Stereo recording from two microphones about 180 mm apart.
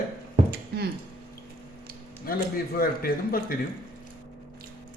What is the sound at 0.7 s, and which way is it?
Squish, 60° right (ahead or behind).